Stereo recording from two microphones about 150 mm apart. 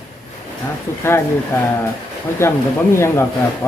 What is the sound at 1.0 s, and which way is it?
Speech, 15° left (ahead or behind).